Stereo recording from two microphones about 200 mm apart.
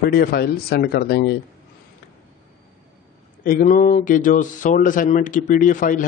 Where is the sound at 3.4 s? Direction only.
40° left (ahead or behind).